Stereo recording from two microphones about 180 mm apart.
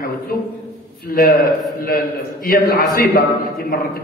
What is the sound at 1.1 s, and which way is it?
A man's voice, 55° left (ahead or behind).